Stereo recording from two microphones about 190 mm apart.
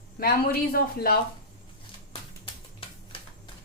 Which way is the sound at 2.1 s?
30° left (ahead or behind).